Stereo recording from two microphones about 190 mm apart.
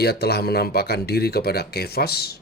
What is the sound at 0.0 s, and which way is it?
Speech, 55° left (ahead or behind).